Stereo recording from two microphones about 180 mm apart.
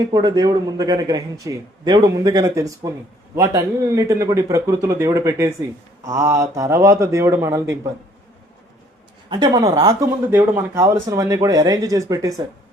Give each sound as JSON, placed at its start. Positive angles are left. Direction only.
{"t": 0.1, "sound": "a man's voice", "side_deg": -25}
{"t": 9.3, "sound": "a man's voice", "side_deg": -20}